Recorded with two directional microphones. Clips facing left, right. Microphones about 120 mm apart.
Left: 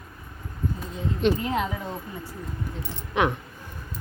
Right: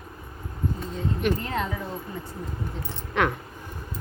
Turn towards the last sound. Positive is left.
turn(degrees=15)  # may be behind; listen again after turning